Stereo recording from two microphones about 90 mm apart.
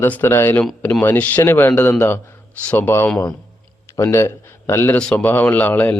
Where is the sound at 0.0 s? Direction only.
25° left (ahead or behind).